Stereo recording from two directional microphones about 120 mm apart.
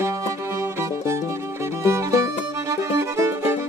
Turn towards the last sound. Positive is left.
turn(degrees=-20)  # may be behind; listen again after turning